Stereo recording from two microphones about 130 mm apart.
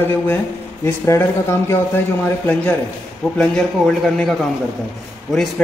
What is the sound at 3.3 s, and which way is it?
A man's voice, 5° left (ahead or behind).